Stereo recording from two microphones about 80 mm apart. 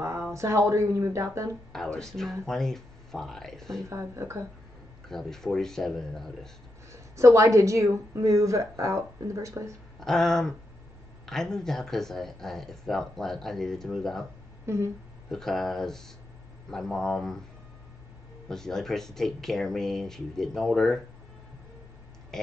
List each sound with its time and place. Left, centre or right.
0.0 s speech: right
1.7 s speech: centre
3.9 s a woman's voice: right
5.1 s speech: centre
6.9 s a woman's voice: right
9.9 s speech: centre
14.7 s a woman's voice: right
15.3 s speech: centre
18.5 s speech: centre
22.3 s speech: centre